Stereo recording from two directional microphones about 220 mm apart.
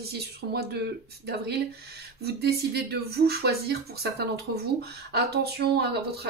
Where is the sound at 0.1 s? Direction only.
45° right (ahead or behind).